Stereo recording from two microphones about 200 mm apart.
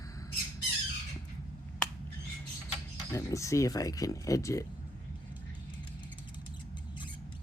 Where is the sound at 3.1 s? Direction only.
15° left (ahead or behind).